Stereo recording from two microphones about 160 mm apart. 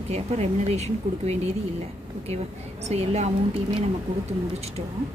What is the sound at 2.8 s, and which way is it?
Speech, 40° right (ahead or behind).